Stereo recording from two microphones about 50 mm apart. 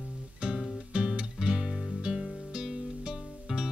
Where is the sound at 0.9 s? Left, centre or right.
Centre.